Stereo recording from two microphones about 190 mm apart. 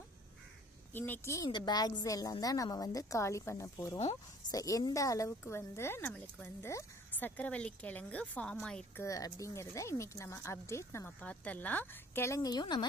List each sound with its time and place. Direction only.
0.9 s a woman's voice: 10° left (ahead or behind)